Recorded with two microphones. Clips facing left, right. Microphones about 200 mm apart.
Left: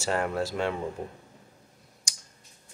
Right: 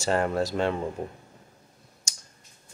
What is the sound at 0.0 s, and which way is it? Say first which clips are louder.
Speech: right 3 dB; 5° left (ahead or behind).